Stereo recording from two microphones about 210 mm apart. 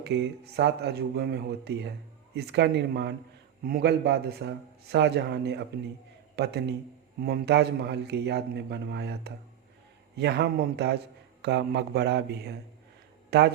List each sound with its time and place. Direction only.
0.0 s a man's voice: 55° right (ahead or behind)